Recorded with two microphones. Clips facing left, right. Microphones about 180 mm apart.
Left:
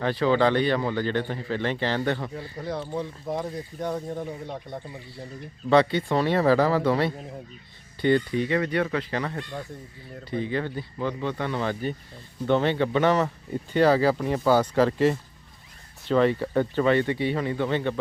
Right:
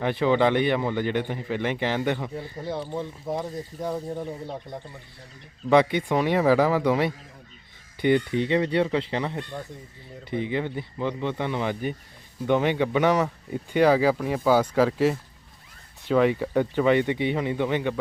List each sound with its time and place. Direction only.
0.0 s speech: 20° right (ahead or behind); by 4.8 s centre (ahead or behind)
5.7 s speech: 15° right (ahead or behind)